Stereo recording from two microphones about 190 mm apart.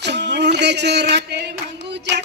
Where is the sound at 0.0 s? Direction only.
65° right (ahead or behind).